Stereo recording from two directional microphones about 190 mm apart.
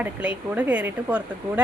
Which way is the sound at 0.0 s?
5° right (ahead or behind).